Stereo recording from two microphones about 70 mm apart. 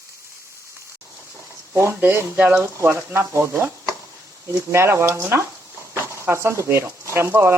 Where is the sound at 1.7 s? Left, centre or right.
Right.